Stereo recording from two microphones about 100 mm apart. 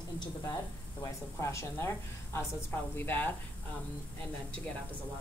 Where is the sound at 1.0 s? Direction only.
30° left (ahead or behind).